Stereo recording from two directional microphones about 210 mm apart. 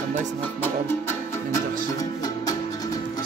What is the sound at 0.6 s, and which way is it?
Music, 10° left (ahead or behind).